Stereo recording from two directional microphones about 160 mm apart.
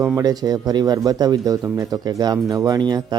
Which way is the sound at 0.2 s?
25° right (ahead or behind).